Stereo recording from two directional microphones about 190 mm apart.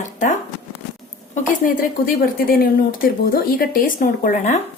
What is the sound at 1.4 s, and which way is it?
Speech, 45° left (ahead or behind).